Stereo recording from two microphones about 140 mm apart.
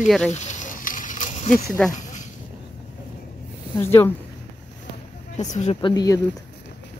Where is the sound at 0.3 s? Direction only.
60° left (ahead or behind).